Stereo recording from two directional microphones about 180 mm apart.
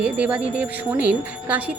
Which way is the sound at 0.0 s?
10° right (ahead or behind).